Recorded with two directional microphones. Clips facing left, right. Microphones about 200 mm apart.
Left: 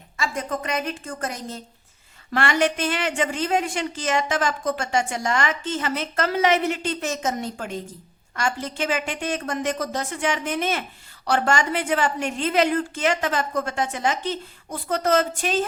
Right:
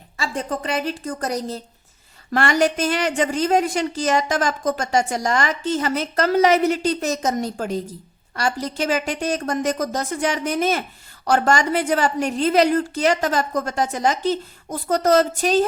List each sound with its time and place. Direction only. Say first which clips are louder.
0.2 s a woman's voice: right 2 dB; 30° right (ahead or behind)